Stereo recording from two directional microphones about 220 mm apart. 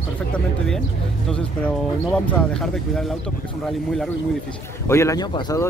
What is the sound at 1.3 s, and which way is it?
Speech, 5° left (ahead or behind).